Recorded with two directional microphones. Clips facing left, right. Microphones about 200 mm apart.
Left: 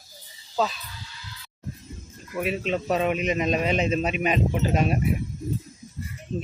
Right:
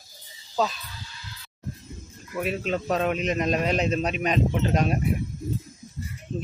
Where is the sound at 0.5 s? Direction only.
Centre (ahead or behind).